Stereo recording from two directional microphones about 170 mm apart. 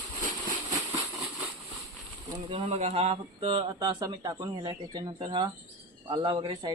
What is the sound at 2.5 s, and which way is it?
Speech, 35° right (ahead or behind).